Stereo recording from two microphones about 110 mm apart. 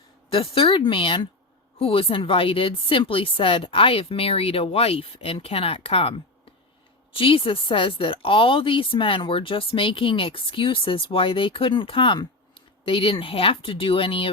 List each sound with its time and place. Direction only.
0.3 s speech: 55° left (ahead or behind)